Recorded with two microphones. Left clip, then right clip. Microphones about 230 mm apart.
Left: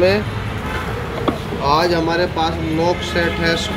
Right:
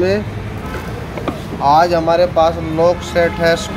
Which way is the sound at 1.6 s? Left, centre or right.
Right.